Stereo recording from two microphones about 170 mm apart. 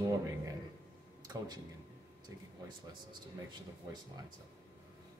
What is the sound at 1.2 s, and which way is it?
Speech, 25° right (ahead or behind).